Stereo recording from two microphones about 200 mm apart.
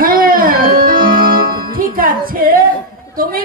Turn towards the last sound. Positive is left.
turn(degrees=-45)  # may be behind; listen again after turning